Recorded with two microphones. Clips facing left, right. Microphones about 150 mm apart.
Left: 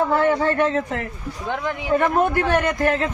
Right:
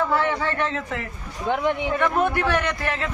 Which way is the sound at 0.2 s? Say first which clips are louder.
Left 6 dB; 40° left (ahead or behind).